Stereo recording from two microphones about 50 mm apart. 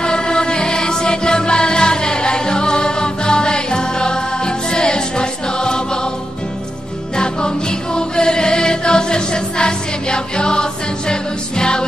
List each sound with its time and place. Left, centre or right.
0.0 s music: centre
7.2 s music: centre